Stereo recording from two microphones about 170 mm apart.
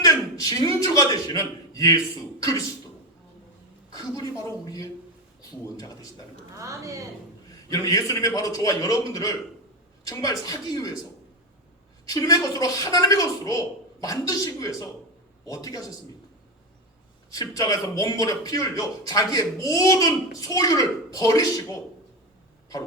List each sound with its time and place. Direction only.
0.0 s a sound: 20° left (ahead or behind)
0.9 s a man's voice: 20° left (ahead or behind)
3.9 s a man's voice: 20° left (ahead or behind)
6.5 s a woman's voice: 20° right (ahead or behind)
7.7 s a man's voice: 20° left (ahead or behind)
12.0 s a man's voice: 20° left (ahead or behind)
17.3 s a man's voice: 20° left (ahead or behind)